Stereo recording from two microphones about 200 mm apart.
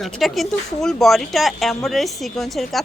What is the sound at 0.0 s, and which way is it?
Speech, centre (ahead or behind).